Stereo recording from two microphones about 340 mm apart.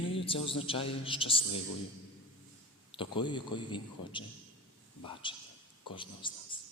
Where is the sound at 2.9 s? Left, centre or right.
Centre.